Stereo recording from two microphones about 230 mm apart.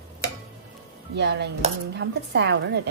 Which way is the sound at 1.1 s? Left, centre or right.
Right.